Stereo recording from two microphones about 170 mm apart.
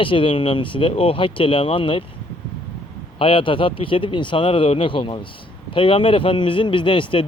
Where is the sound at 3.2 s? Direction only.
30° left (ahead or behind).